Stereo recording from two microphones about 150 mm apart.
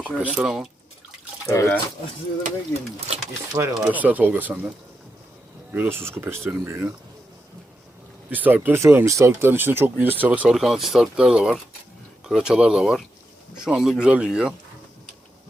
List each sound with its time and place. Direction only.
0.0 s speech: 10° right (ahead or behind)
1.5 s speech: 20° left (ahead or behind)
3.5 s speech: 20° right (ahead or behind)
5.7 s speech: 15° right (ahead or behind)
8.3 s speech: 10° right (ahead or behind)